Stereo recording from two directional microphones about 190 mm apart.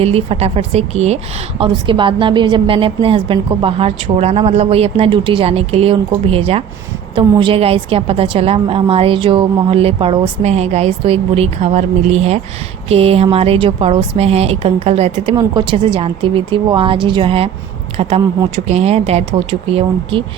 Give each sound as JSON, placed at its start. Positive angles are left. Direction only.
{"t": 0.0, "sound": "a woman's voice", "side_deg": -30}
{"t": 18.5, "sound": "a woman's voice", "side_deg": -35}